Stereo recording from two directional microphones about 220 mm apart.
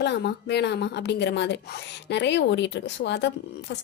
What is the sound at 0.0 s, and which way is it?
A woman's voice, 50° left (ahead or behind).